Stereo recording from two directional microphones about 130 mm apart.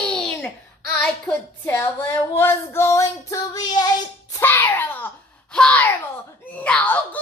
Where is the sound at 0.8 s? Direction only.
10° left (ahead or behind); by 3.9 s 30° left (ahead or behind).